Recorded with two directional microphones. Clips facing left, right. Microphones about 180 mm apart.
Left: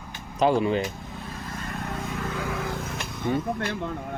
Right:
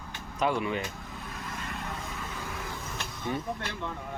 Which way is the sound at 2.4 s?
90° left.